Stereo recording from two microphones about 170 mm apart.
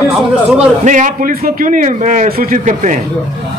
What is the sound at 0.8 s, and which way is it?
A man's voice, 45° right (ahead or behind).